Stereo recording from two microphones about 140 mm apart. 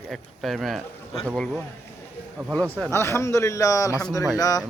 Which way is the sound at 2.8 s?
20° left (ahead or behind).